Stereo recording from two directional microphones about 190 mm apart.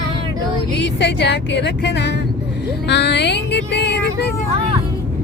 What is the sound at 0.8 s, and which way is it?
A woman's voice, 65° left (ahead or behind).